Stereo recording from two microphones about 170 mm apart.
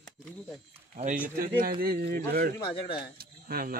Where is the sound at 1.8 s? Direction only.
60° right (ahead or behind).